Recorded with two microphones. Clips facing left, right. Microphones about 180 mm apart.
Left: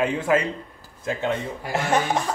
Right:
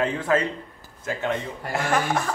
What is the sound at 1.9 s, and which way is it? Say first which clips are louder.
Music: left 2 dB; 20° left (ahead or behind).